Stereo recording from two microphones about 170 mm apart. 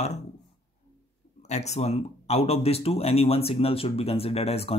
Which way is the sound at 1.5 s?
40° left (ahead or behind).